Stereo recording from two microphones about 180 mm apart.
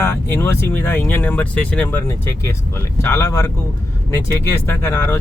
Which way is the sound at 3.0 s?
15° left (ahead or behind).